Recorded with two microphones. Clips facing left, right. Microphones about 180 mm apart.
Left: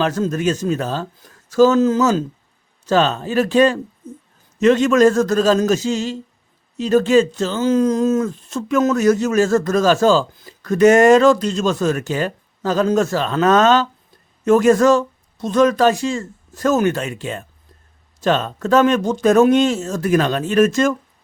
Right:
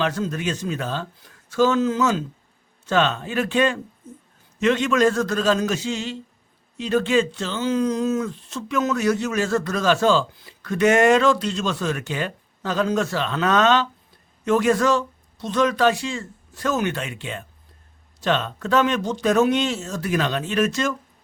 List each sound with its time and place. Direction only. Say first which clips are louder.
0.0 s speech: left 6 dB; 45° left (ahead or behind)